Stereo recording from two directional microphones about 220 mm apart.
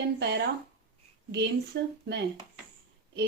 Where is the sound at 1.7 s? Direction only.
50° right (ahead or behind).